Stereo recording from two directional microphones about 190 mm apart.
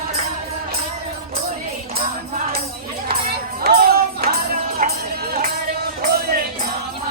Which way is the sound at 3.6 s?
55° right (ahead or behind).